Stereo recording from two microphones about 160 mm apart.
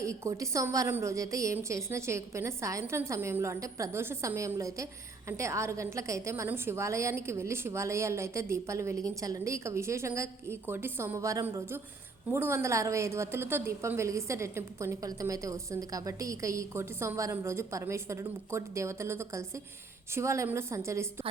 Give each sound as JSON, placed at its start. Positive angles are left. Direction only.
{"t": 0.0, "sound": "a woman's voice", "side_deg": -20}